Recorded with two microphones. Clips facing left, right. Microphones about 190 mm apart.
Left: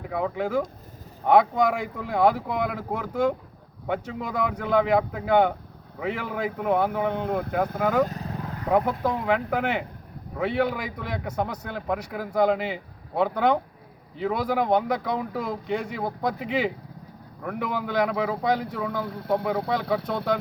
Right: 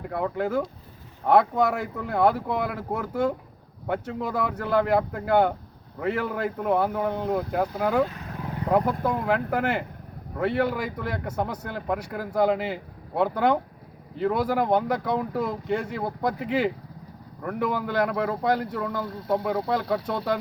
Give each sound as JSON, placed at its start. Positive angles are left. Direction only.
{"t": 0.0, "sound": "a man's voice", "side_deg": 0}
{"t": 6.6, "sound": "a man's voice", "side_deg": 5}
{"t": 8.0, "sound": "vehicle", "side_deg": 40}
{"t": 8.7, "sound": "a man's voice", "side_deg": 5}